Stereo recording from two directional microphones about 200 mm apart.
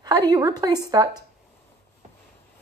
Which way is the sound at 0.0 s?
20° right (ahead or behind).